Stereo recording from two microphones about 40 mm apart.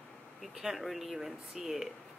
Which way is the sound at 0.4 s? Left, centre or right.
Centre.